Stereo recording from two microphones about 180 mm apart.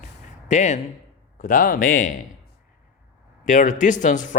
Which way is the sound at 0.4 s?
40° left (ahead or behind).